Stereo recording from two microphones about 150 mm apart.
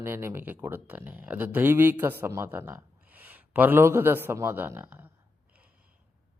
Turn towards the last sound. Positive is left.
turn(degrees=-15)  # may be behind; listen again after turning